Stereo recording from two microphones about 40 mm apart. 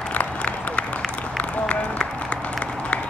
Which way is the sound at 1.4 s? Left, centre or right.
Left.